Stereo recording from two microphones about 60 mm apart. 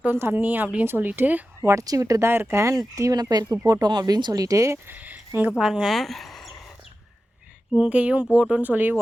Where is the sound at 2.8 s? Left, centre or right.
Right.